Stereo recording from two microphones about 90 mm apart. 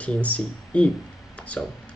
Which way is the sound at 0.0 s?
15° left (ahead or behind).